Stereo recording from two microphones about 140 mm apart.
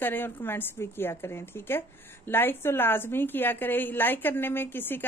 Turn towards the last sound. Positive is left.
turn(degrees=15)  # may be behind; listen again after turning